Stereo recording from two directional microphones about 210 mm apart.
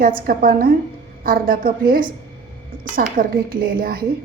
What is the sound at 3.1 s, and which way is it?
Speech, 45° right (ahead or behind).